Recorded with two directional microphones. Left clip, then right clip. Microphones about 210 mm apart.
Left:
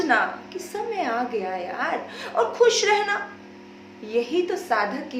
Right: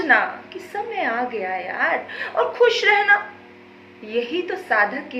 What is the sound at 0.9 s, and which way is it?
A woman's voice, 30° left (ahead or behind).